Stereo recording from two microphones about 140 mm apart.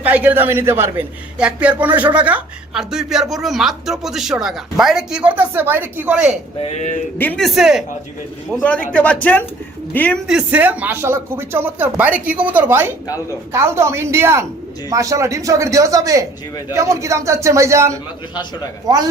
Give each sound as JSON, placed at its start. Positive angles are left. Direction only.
{"t": 0.0, "sound": "a woman's voice", "side_deg": -10}
{"t": 6.6, "sound": "speech", "side_deg": 50}
{"t": 7.2, "sound": "speech", "side_deg": 10}
{"t": 7.4, "sound": "a woman's voice", "side_deg": -5}
{"t": 8.9, "sound": "speech", "side_deg": 10}
{"t": 10.2, "sound": "speech", "side_deg": -10}